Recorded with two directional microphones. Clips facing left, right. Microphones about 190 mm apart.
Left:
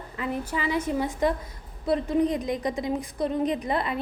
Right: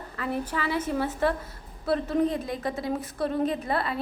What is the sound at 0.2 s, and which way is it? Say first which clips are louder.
A woman's voice: even; 15° left (ahead or behind).